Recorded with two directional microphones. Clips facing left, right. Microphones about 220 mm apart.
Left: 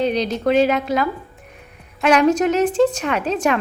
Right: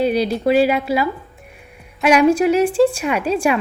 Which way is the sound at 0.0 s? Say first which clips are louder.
Right 2 dB; 10° right (ahead or behind).